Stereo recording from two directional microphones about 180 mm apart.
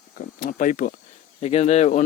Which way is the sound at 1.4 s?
35° left (ahead or behind).